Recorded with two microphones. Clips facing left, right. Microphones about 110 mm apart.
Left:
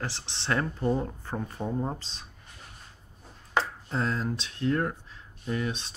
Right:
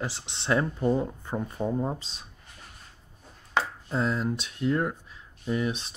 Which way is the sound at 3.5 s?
5° right (ahead or behind).